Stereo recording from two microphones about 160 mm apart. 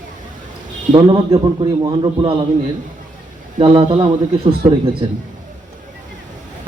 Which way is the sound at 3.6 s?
35° right (ahead or behind).